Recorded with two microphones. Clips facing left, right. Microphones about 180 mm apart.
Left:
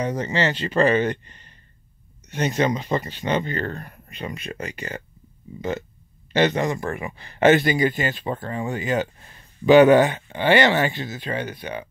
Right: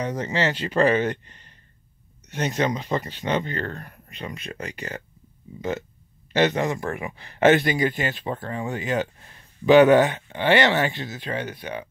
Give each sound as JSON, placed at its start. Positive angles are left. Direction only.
{"t": 0.0, "sound": "speech", "side_deg": 0}
{"t": 2.3, "sound": "speech", "side_deg": 0}